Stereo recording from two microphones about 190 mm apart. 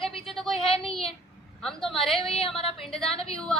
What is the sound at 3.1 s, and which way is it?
Speech, 30° left (ahead or behind).